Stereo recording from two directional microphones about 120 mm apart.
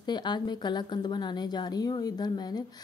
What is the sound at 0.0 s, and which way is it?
Speech, 40° left (ahead or behind).